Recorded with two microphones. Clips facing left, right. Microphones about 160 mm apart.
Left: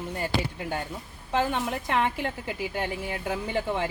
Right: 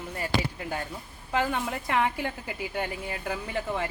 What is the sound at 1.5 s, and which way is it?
A woman's voice, centre (ahead or behind).